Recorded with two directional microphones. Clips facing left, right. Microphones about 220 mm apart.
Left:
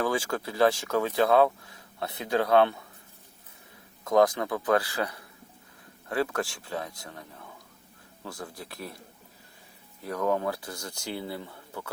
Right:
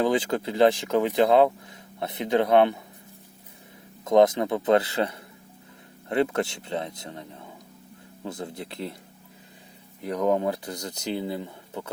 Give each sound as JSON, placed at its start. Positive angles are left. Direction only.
{"t": 0.0, "sound": "speech", "side_deg": -20}
{"t": 4.0, "sound": "speech", "side_deg": -20}
{"t": 10.0, "sound": "speech", "side_deg": -15}